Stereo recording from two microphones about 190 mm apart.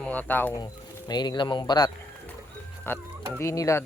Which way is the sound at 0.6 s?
20° left (ahead or behind).